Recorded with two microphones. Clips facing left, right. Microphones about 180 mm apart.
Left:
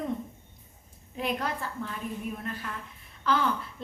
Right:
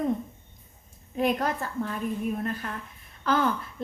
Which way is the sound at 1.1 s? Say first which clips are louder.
Right 5 dB; 45° right (ahead or behind).